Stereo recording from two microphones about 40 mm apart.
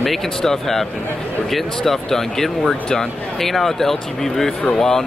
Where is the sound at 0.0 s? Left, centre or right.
Centre.